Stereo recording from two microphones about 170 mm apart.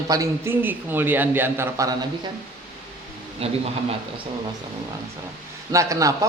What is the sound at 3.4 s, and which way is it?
Speech, 35° right (ahead or behind).